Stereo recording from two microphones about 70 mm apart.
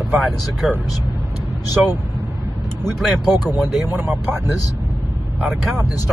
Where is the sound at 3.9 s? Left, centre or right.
Right.